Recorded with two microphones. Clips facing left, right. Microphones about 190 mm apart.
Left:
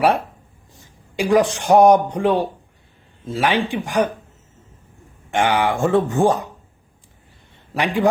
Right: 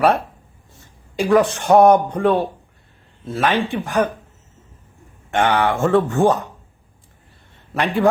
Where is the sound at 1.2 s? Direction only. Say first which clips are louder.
Right 1 dB; 10° left (ahead or behind).